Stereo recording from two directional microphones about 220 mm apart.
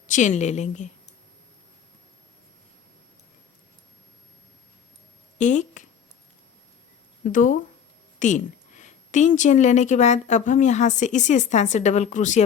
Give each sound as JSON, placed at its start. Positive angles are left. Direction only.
{"t": 0.1, "sound": "a woman's voice", "side_deg": 35}
{"t": 5.4, "sound": "speech", "side_deg": 35}
{"t": 7.3, "sound": "a woman's voice", "side_deg": 35}